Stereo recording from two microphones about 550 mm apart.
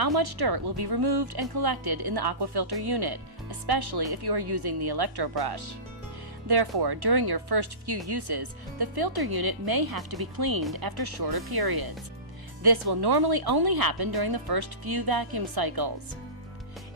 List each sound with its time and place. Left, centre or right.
0.0 s speech: right